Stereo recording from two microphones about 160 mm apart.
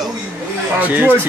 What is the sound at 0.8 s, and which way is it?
Speech, 10° right (ahead or behind).